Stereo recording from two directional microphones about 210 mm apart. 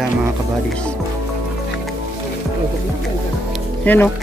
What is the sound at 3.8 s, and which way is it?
Speech, 10° left (ahead or behind).